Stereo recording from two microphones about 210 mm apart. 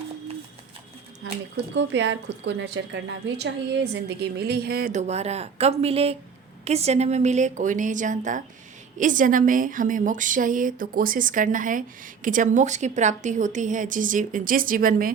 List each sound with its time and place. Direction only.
1.7 s a woman's voice: 60° right (ahead or behind); by 15.1 s 45° right (ahead or behind)